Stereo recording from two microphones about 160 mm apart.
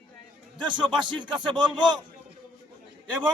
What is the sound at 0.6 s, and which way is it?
A man's voice, 30° right (ahead or behind).